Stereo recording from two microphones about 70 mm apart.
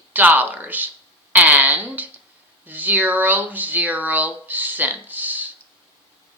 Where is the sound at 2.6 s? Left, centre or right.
Right.